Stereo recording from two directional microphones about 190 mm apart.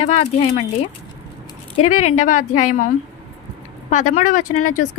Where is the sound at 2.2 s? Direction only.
45° left (ahead or behind).